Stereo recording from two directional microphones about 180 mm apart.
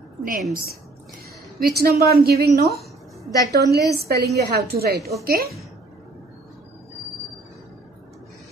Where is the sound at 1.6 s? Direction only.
60° right (ahead or behind).